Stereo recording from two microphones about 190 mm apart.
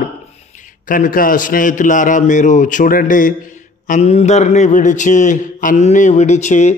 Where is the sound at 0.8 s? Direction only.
45° left (ahead or behind).